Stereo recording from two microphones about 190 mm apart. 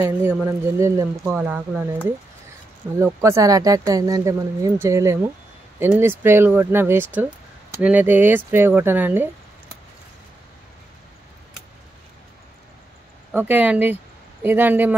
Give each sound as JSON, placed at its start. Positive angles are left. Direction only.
{"t": 0.0, "sound": "speech", "side_deg": -10}
{"t": 3.0, "sound": "speech", "side_deg": -15}
{"t": 13.3, "sound": "speech", "side_deg": -10}